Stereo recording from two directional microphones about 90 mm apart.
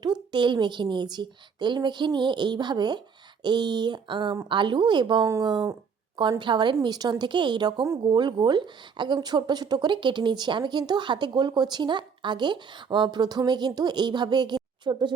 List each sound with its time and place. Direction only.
0.0 s a woman's voice: 55° right (ahead or behind)
6.8 s a woman's voice: 50° right (ahead or behind)